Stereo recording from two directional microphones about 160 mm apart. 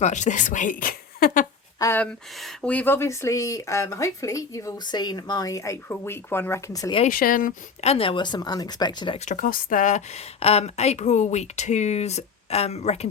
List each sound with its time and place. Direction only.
0.0 s speech: 50° left (ahead or behind)
1.8 s speech: 10° left (ahead or behind)
7.1 s speech: 60° left (ahead or behind)
7.9 s speech: 35° left (ahead or behind)
9.1 s speech: 50° left (ahead or behind)